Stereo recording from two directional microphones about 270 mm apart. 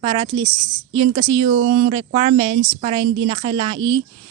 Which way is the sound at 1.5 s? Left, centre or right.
Right.